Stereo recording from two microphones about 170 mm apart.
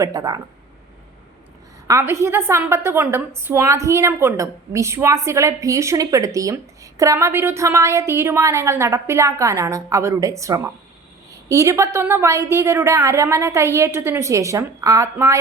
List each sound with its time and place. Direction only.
0.0 s speech: 20° right (ahead or behind)
1.9 s a woman's voice: 15° right (ahead or behind)